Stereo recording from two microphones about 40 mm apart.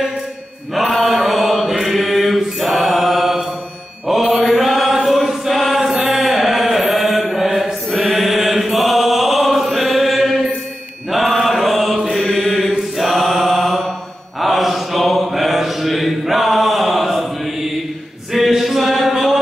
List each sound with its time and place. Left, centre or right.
0.7 s chant: centre
4.1 s mantra: centre
5.1 s chant: centre
6.4 s mantra: centre
8.5 s chant: centre
11.1 s mantra: centre
18.3 s a sound: centre